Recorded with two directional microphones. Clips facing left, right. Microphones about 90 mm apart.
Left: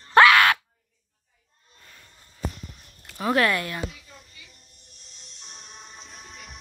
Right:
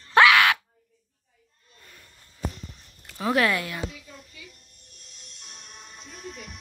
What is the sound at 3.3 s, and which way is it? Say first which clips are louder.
Speech: left 1 dB; 10° right (ahead or behind).